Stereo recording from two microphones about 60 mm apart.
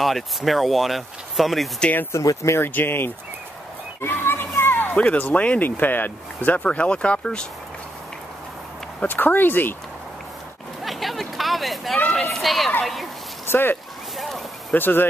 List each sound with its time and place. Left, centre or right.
0.0 s speech: centre
2.1 s speech: left
2.5 s speech: left
4.0 s children playing: left
4.9 s speech: left
9.0 s speech: left
10.8 s a sound: centre
12.3 s run: centre
13.5 s speech: left
14.1 s a sound: centre
14.7 s speech: left